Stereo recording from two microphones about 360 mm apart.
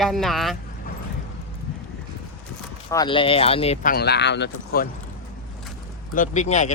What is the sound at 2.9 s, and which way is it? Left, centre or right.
Speech, centre.